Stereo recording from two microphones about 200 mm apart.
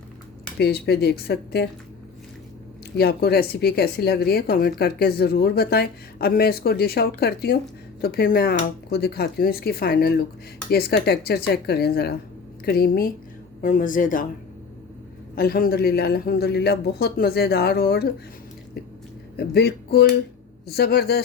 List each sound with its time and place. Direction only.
0.6 s speech: 55° left (ahead or behind)
3.0 s speech: 50° left (ahead or behind)
15.4 s speech: 50° left (ahead or behind)
19.4 s speech: 55° left (ahead or behind)